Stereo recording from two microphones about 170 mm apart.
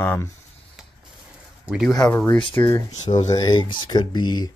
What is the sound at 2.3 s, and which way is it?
Speech, 30° left (ahead or behind).